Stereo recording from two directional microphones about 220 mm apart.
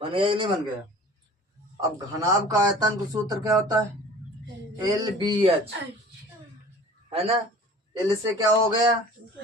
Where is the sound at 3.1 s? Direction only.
15° right (ahead or behind).